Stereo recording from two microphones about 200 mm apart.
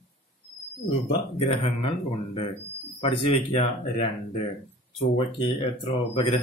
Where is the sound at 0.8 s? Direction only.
30° left (ahead or behind).